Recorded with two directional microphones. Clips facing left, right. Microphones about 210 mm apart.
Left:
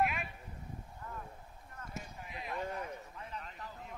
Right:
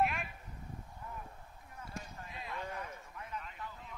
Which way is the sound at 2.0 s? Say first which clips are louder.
Left 1 dB; 15° left (ahead or behind).